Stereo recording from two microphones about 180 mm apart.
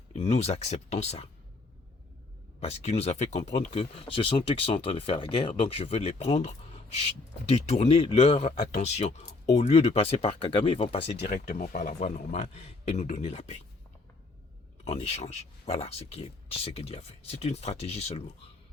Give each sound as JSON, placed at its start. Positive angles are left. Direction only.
{"t": 0.1, "sound": "speech", "side_deg": 35}
{"t": 2.6, "sound": "speech", "side_deg": 35}
{"t": 11.3, "sound": "speech", "side_deg": 45}
{"t": 14.8, "sound": "speech", "side_deg": 35}